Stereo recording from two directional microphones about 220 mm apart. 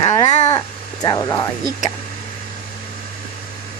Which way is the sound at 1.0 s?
15° left (ahead or behind).